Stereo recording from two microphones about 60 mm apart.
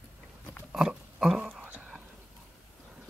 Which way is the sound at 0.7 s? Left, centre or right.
Centre.